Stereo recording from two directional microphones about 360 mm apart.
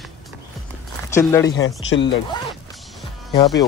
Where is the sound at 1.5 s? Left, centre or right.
Left.